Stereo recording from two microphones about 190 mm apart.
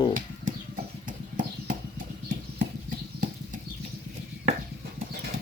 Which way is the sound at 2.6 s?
45° right (ahead or behind).